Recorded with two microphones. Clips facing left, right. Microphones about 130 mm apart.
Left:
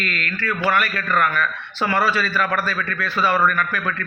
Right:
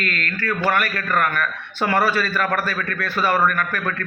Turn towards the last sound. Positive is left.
turn(degrees=-45)  # may be behind; listen again after turning